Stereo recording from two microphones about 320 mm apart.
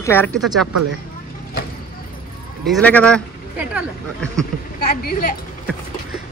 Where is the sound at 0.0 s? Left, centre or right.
Centre.